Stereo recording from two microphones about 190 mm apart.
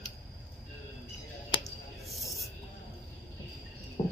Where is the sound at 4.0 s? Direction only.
40° left (ahead or behind).